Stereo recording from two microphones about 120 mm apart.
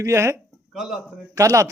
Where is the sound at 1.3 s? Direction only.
30° right (ahead or behind).